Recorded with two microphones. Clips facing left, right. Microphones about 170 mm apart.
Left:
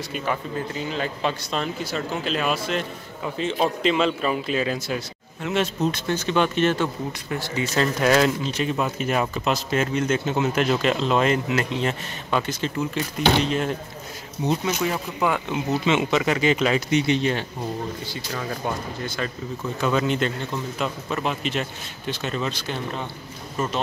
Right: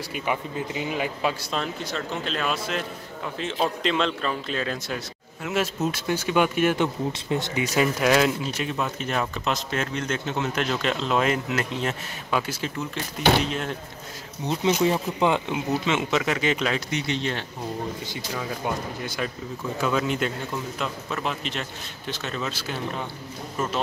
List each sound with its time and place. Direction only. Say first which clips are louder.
0.1 s speech: left 1 dB; 15° right (ahead or behind)
1.5 s speech: left 2 dB; 5° left (ahead or behind)
7.1 s speech: right 2 dB; 20° right (ahead or behind); by 13.7 s centre (ahead or behind)
14.6 s speech: right 3 dB; 25° right (ahead or behind)
15.5 s speech: left 3 dB; centre (ahead or behind)
16.9 s speech: left 6 dB; 15° left (ahead or behind)
19.0 s speech: left 1 dB; 10° right (ahead or behind)